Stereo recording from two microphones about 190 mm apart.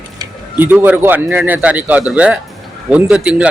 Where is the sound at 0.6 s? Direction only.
10° right (ahead or behind).